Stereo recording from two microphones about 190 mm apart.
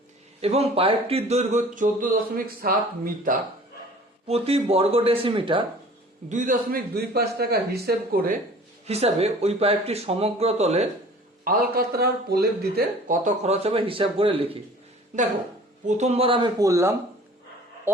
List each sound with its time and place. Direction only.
0.4 s speech: 30° right (ahead or behind); by 3.3 s 50° right (ahead or behind)
4.3 s speech: 30° right (ahead or behind)
6.2 s a man's voice: 40° right (ahead or behind)
8.9 s speech: 30° right (ahead or behind)
11.4 s a man's voice: 55° right (ahead or behind)
13.2 s speech: 35° right (ahead or behind)
16.0 s speech: 35° right (ahead or behind); by 18.0 s 10° right (ahead or behind)